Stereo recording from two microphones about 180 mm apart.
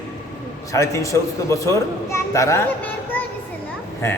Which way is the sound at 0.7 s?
15° left (ahead or behind).